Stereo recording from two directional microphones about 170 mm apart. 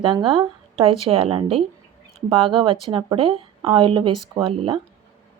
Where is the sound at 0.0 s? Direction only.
30° right (ahead or behind).